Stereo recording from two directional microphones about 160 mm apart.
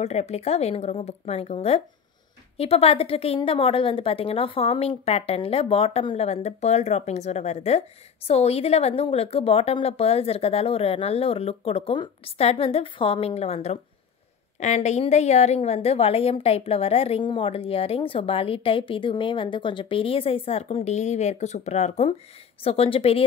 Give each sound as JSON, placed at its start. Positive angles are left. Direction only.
{"t": 0.0, "sound": "a woman's voice", "side_deg": 40}